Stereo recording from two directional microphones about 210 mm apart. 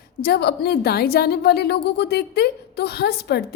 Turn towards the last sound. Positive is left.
turn(degrees=50)  # may be behind; listen again after turning